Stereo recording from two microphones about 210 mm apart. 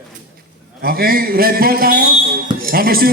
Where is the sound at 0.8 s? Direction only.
45° right (ahead or behind).